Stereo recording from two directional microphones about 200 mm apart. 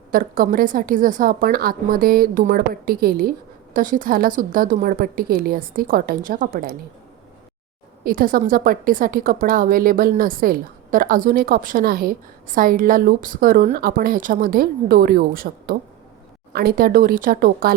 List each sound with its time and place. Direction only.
0.1 s a woman's voice: 45° right (ahead or behind)
8.0 s a woman's voice: 45° right (ahead or behind)